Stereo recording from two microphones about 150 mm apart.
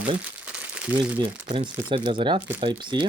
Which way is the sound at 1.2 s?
30° right (ahead or behind).